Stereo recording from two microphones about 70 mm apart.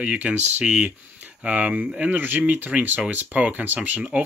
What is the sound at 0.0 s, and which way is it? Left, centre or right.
Speech, right.